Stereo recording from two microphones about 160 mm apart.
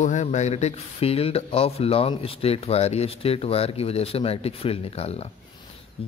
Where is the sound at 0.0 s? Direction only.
50° left (ahead or behind).